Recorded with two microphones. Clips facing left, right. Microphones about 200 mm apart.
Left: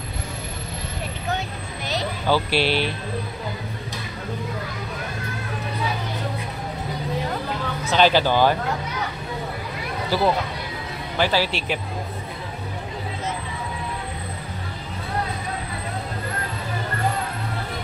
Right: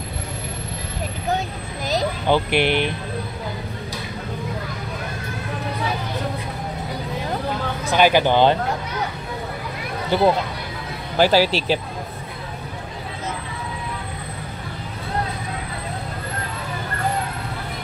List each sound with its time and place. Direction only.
2.2 s speech: 20° right (ahead or behind)
7.8 s speech: 15° right (ahead or behind)
10.0 s speech: 20° right (ahead or behind)
11.1 s speech: 40° right (ahead or behind)